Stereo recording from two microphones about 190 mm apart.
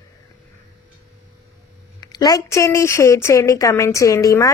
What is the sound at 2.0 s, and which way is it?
Speech, 20° left (ahead or behind).